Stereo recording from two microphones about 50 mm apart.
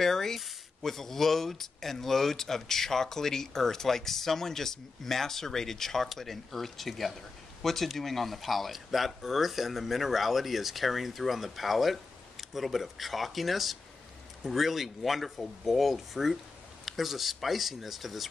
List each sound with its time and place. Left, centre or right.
0.0 s speech: centre